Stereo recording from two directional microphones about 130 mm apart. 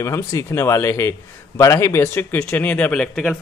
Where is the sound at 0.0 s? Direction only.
25° left (ahead or behind).